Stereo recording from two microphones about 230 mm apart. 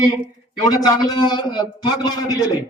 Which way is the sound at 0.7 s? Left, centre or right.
Centre.